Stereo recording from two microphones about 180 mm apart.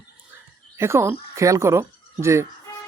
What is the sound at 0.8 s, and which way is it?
Speech, 15° right (ahead or behind).